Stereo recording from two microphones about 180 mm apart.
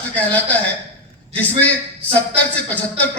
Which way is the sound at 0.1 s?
10° left (ahead or behind).